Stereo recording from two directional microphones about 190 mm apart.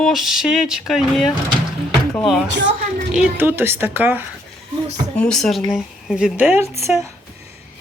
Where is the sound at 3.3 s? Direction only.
10° right (ahead or behind).